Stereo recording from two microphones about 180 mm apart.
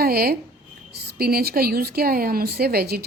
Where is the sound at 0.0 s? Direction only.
55° right (ahead or behind).